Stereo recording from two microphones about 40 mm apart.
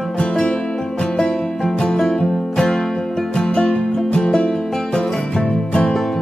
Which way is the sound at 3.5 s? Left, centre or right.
Left.